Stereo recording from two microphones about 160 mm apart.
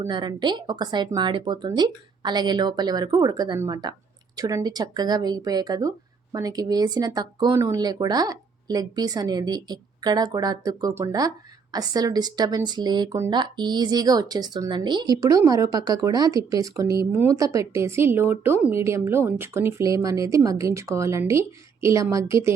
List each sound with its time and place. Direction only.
0.1 s a woman's voice: 30° right (ahead or behind)